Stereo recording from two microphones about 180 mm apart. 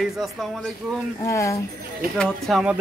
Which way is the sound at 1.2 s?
15° left (ahead or behind).